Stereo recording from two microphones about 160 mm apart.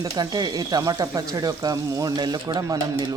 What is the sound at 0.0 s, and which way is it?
Speech, 25° right (ahead or behind).